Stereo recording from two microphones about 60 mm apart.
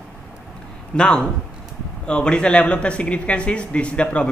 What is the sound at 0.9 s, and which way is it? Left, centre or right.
A man's voice, centre.